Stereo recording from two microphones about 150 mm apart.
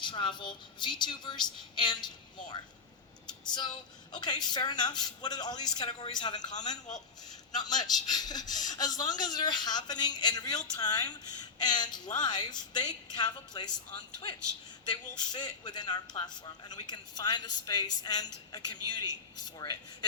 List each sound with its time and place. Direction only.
0.0 s a woman's voice: 30° left (ahead or behind)
4.1 s a man's voice: 30° left (ahead or behind)